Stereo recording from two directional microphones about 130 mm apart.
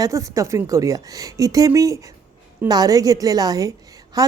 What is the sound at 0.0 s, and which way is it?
Speech, 25° right (ahead or behind).